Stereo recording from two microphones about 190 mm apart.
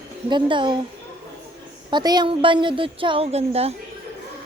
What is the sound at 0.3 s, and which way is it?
Speech, 25° right (ahead or behind).